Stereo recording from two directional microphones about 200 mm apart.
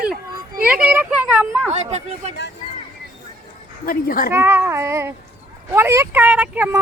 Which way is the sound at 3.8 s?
45° left (ahead or behind).